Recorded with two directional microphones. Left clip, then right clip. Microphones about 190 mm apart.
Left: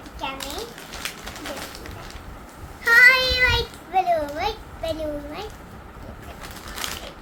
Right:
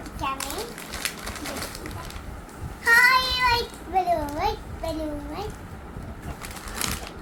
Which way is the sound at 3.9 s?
15° left (ahead or behind).